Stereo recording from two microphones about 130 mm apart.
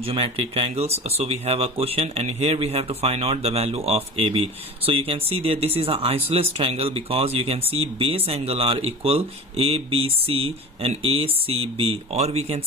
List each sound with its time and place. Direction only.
0.0 s speech: 45° right (ahead or behind)